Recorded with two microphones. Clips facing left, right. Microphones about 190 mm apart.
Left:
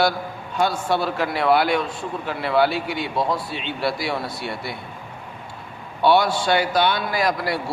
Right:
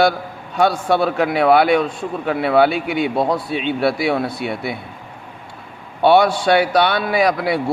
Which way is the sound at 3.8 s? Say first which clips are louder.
Right 6 dB; 60° right (ahead or behind).